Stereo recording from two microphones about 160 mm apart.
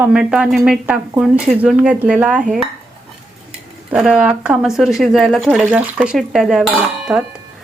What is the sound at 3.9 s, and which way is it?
A woman's voice, 10° right (ahead or behind).